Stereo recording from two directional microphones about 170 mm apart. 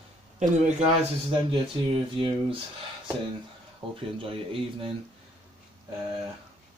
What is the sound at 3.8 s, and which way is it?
Speech, 30° right (ahead or behind).